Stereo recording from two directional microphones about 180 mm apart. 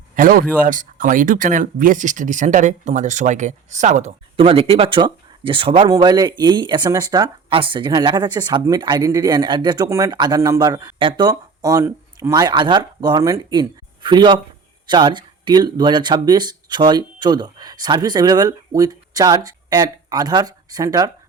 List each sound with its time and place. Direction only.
0.2 s speech: 50° right (ahead or behind)
4.4 s speech: 30° right (ahead or behind)